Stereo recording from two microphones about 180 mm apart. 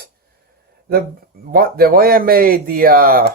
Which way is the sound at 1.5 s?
55° right (ahead or behind).